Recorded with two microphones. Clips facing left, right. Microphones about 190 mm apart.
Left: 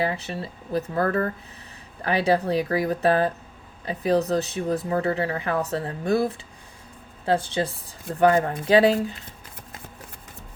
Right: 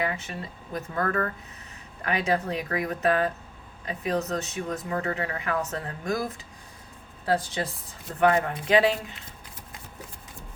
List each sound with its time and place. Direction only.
0.0 s speech: 35° left (ahead or behind)